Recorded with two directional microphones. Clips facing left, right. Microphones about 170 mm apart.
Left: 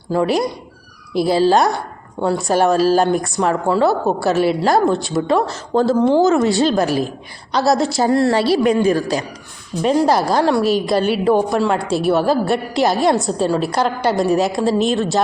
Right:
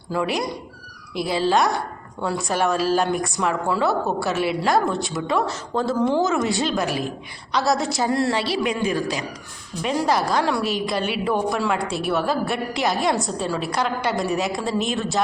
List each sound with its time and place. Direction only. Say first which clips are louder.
0.1 s a woman's voice: left 7 dB; 35° left (ahead or behind)